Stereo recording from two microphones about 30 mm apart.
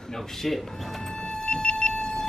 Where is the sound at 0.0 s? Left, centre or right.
Centre.